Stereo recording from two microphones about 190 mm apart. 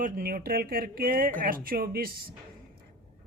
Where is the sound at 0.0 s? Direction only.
50° right (ahead or behind).